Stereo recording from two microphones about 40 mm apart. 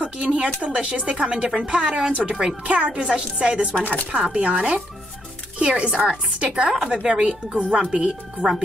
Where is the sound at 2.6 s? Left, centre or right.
Right.